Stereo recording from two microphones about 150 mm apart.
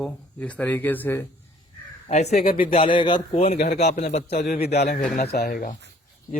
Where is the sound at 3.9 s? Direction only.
50° left (ahead or behind).